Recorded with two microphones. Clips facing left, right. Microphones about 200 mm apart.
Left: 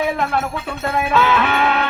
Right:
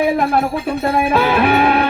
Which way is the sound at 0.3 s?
35° right (ahead or behind).